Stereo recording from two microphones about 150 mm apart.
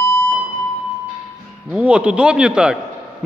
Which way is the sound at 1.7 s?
5° right (ahead or behind).